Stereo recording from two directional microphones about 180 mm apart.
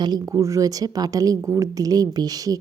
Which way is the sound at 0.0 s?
20° right (ahead or behind).